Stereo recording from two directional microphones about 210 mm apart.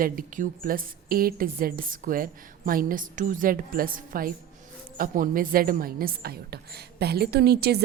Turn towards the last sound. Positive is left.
turn(degrees=-50)  # may be behind; listen again after turning